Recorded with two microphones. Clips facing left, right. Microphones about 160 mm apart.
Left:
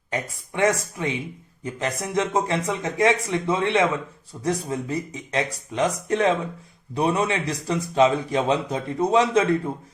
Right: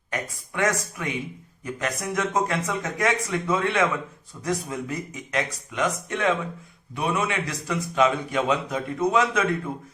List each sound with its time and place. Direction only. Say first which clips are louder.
0.1 s a man's voice: left 2 dB; 25° left (ahead or behind)